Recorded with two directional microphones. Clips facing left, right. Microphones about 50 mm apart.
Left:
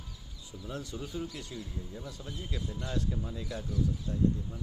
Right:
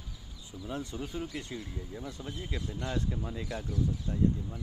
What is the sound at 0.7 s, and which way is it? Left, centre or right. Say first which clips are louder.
Speech: right 2 dB; right.